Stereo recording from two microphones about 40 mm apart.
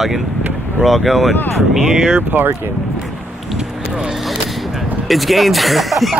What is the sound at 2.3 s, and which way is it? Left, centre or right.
Speech, right.